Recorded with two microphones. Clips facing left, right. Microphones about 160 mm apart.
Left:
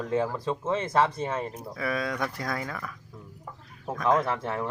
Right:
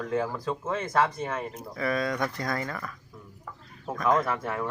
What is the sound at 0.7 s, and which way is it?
Speech, 25° left (ahead or behind).